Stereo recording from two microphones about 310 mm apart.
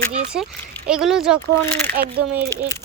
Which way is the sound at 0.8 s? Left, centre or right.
Centre.